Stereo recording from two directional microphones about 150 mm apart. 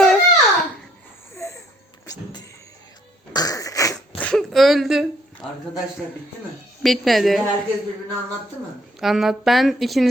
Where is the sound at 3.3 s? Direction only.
25° left (ahead or behind).